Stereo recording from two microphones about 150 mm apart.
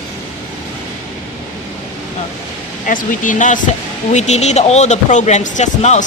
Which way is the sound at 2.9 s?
60° left (ahead or behind).